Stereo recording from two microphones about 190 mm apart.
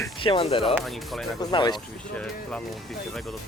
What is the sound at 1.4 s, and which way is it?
Speech, 20° left (ahead or behind).